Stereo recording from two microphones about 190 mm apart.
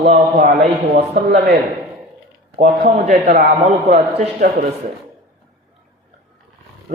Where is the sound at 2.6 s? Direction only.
35° right (ahead or behind).